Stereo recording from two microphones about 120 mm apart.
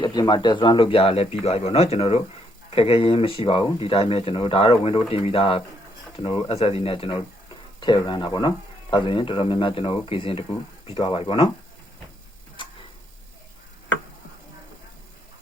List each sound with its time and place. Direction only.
0.0 s a man's voice: 35° left (ahead or behind)